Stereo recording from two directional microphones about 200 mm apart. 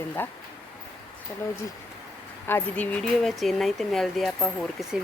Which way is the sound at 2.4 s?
10° left (ahead or behind).